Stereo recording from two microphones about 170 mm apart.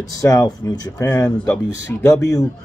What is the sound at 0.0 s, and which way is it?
Speech, 20° left (ahead or behind).